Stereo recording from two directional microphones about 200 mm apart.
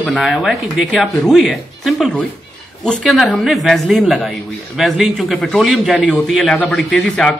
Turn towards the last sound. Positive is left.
turn(degrees=5)  # may be behind; listen again after turning